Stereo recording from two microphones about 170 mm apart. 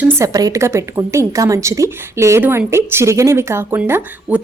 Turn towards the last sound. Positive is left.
turn(degrees=-10)  # may be behind; listen again after turning